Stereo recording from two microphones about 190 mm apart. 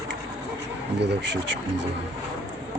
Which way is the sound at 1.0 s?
70° right (ahead or behind).